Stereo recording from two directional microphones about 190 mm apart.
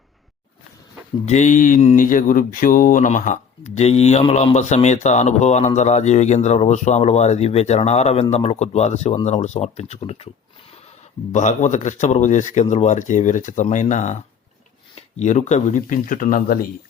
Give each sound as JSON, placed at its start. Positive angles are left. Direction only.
{"t": 1.2, "sound": "speech", "side_deg": 40}
{"t": 11.3, "sound": "speech", "side_deg": 40}